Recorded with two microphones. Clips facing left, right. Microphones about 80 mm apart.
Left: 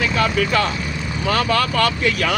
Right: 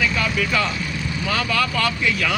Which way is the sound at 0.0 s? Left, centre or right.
Left.